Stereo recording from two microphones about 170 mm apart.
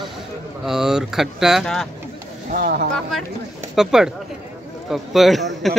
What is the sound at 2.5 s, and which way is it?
Speech, 60° right (ahead or behind).